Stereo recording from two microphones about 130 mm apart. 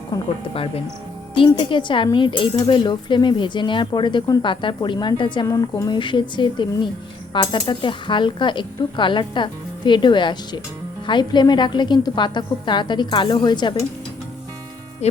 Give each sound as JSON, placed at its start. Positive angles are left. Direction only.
{"t": 0.1, "sound": "speech", "side_deg": 30}
{"t": 1.4, "sound": "speech", "side_deg": 40}
{"t": 15.0, "sound": "speech", "side_deg": 55}